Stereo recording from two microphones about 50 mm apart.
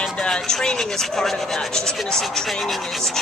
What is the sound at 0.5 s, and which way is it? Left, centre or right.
Speech, centre.